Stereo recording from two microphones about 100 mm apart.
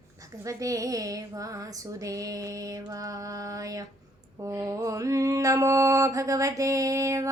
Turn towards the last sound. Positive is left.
turn(degrees=-35)  # may be behind; listen again after turning